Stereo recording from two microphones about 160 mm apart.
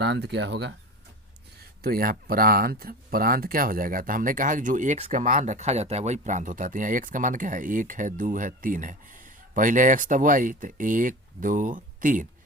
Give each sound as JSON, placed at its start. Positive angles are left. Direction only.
{"t": 0.0, "sound": "speech", "side_deg": -90}
{"t": 1.8, "sound": "speech", "side_deg": -65}